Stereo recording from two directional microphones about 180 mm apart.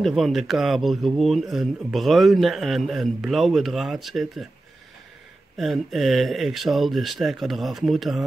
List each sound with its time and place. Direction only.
0.0 s speech: centre (ahead or behind)
5.6 s speech: centre (ahead or behind)